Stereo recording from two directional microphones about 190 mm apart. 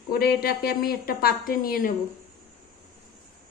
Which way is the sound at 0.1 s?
55° left (ahead or behind).